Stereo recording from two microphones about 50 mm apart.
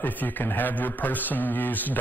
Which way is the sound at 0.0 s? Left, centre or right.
Left.